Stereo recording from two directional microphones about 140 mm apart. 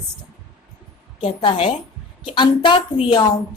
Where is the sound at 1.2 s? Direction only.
40° left (ahead or behind).